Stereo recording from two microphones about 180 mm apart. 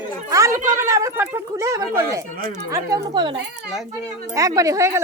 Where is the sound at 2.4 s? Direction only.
50° right (ahead or behind).